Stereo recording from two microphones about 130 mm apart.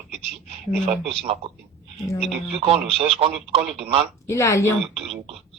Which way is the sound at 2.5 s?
45° right (ahead or behind).